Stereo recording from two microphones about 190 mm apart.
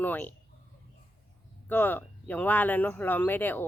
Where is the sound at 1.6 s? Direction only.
10° left (ahead or behind).